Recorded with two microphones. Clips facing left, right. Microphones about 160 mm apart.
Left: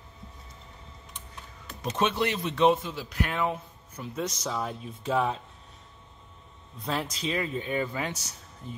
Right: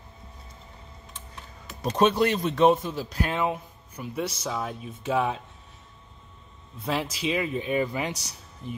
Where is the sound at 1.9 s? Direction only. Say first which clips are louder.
Right 6 dB; 40° right (ahead or behind); by 3.6 s 20° right (ahead or behind).